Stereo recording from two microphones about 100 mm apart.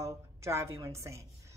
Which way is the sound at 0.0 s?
30° right (ahead or behind).